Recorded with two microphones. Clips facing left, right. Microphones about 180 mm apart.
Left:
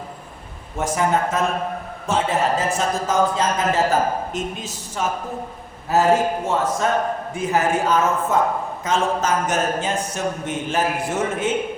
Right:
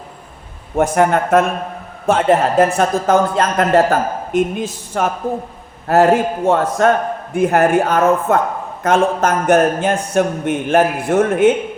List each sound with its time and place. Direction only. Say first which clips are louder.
0.8 s a man's voice: right 6 dB; 60° right (ahead or behind)